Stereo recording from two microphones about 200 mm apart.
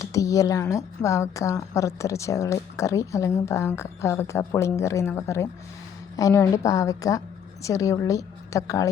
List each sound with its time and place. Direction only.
0.0 s a woman's voice: 15° left (ahead or behind)